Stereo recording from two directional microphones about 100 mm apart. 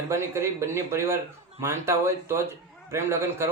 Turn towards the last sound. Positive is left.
turn(degrees=-25)  # may be behind; listen again after turning